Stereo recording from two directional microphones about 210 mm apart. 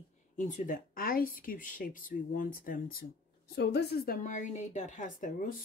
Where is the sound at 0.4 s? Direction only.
40° left (ahead or behind).